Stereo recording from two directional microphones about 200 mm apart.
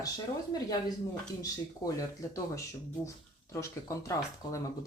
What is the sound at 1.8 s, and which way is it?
Speech, 20° left (ahead or behind).